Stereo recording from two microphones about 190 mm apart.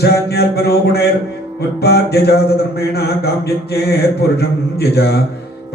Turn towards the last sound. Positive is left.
turn(degrees=60)  # may be behind; listen again after turning